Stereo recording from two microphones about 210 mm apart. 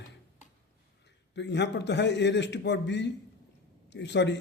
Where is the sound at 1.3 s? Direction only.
55° left (ahead or behind).